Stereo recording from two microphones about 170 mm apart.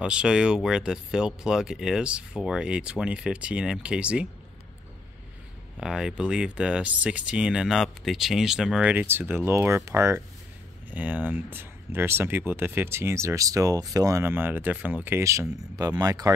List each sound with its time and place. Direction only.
0.0 s speech: 5° right (ahead or behind)
5.8 s speech: 5° right (ahead or behind); by 16.3 s 20° right (ahead or behind)